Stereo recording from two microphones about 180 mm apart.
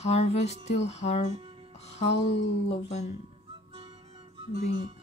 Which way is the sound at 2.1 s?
80° left.